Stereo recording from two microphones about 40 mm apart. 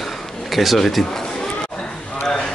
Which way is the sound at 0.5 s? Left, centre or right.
Centre.